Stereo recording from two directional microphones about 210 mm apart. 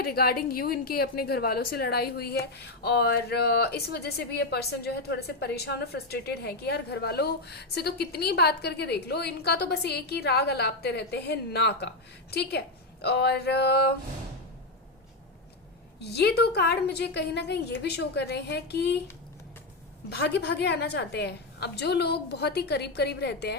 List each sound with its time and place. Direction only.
0.0 s a woman's voice: 45° left (ahead or behind)
16.0 s a woman's voice: 50° left (ahead or behind)
20.1 s a woman's voice: 50° left (ahead or behind)